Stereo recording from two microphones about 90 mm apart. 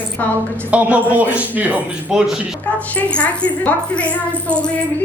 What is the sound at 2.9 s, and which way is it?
Speech, 15° left (ahead or behind).